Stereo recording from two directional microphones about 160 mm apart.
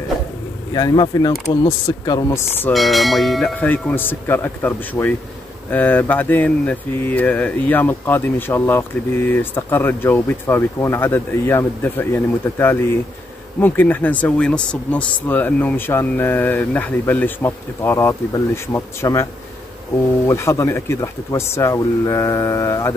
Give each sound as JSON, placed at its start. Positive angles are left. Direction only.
{"t": 0.7, "sound": "speech", "side_deg": 25}
{"t": 2.7, "sound": "speech", "side_deg": 0}
{"t": 20.2, "sound": "speech", "side_deg": 15}